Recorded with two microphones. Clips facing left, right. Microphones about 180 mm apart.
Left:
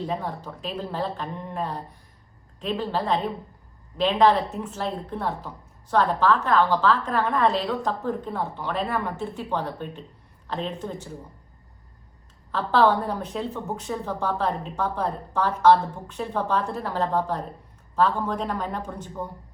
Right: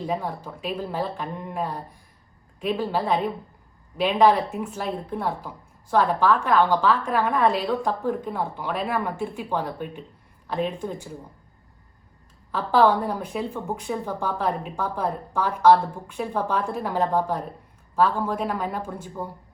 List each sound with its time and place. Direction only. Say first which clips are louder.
0.4 s speech: right 2 dB; 10° right (ahead or behind)
12.5 s speech: right 1 dB; 10° right (ahead or behind)